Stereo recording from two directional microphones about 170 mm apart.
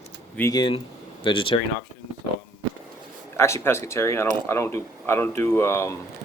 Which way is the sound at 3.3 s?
15° left (ahead or behind).